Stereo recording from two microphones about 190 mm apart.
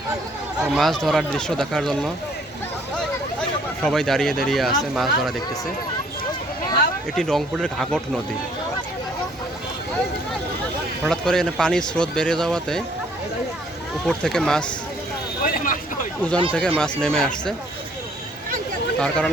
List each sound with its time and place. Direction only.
0.6 s speech: centre (ahead or behind)
3.8 s speech: centre (ahead or behind)
7.2 s speech: centre (ahead or behind)
11.1 s speech: 5° left (ahead or behind)
14.1 s speech: 5° left (ahead or behind)
15.4 s vehicle: 45° left (ahead or behind)
16.2 s speech: 10° left (ahead or behind)
18.9 s speech: 5° left (ahead or behind)